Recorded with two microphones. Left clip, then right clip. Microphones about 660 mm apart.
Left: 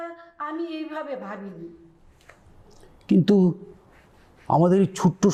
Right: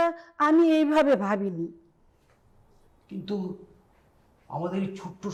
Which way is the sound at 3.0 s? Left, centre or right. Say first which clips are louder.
Left 14 dB; left.